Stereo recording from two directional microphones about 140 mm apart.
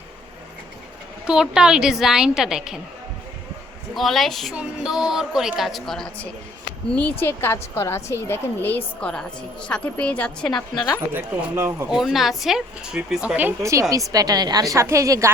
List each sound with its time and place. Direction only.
1.3 s a woman's voice: 5° right (ahead or behind)
3.9 s a woman's voice: centre (ahead or behind)
6.9 s a woman's voice: 15° left (ahead or behind)
10.5 s a woman's voice: 30° left (ahead or behind)
11.1 s speech: 20° right (ahead or behind)
11.9 s a woman's voice: centre (ahead or behind); by 15.3 s 20° right (ahead or behind)